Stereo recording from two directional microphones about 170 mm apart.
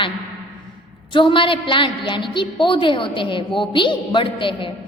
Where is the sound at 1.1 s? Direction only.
30° left (ahead or behind).